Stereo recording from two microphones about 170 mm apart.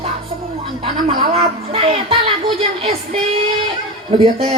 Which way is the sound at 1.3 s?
35° right (ahead or behind).